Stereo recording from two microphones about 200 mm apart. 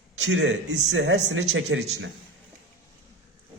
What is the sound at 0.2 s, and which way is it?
A man's voice, 70° right (ahead or behind).